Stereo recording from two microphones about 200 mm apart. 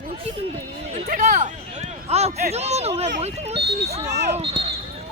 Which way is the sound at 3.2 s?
30° right (ahead or behind).